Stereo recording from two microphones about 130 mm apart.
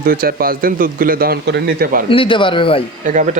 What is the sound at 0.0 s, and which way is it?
Speech, 90° right.